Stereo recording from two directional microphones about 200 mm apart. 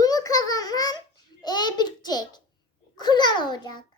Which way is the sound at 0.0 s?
20° left (ahead or behind).